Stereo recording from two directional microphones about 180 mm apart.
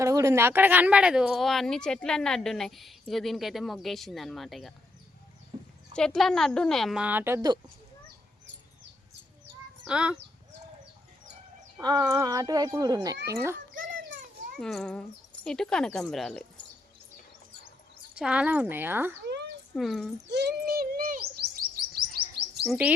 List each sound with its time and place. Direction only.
0.0 s speech: 15° right (ahead or behind); by 4.7 s centre (ahead or behind)
5.9 s speech: 5° left (ahead or behind); by 7.5 s 15° right (ahead or behind)
9.8 s speech: 5° right (ahead or behind)
11.8 s speech: 20° right (ahead or behind)
14.6 s speech: centre (ahead or behind)
18.1 s speech: 5° right (ahead or behind)
19.7 s speech: centre (ahead or behind)
20.2 s bird: 70° right (ahead or behind)